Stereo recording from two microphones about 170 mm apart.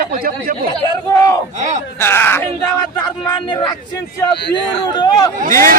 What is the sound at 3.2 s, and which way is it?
Speech, 25° left (ahead or behind).